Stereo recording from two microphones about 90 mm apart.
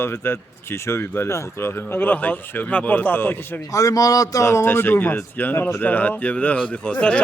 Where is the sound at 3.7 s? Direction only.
40° left (ahead or behind); by 7.2 s 15° left (ahead or behind).